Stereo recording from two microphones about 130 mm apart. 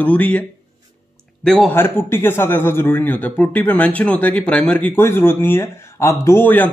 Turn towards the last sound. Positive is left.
turn(degrees=15)  # may be behind; listen again after turning